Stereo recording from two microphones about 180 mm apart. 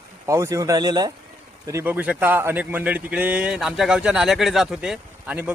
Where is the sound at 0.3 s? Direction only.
15° right (ahead or behind).